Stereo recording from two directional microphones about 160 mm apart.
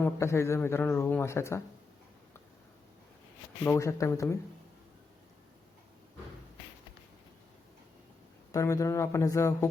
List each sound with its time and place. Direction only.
0.0 s speech: 15° left (ahead or behind)
3.6 s speech: 15° left (ahead or behind)
8.5 s speech: 20° left (ahead or behind)